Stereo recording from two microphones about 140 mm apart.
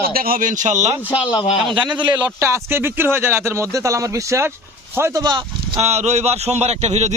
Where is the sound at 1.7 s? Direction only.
35° right (ahead or behind).